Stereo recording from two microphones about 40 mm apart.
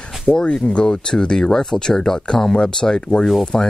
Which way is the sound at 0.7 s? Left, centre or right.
Left.